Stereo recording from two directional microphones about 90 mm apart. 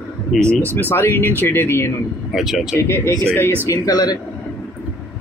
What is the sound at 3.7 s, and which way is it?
Speech, 45° left (ahead or behind).